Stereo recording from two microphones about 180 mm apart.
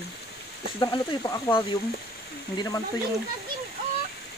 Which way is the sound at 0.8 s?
25° left (ahead or behind).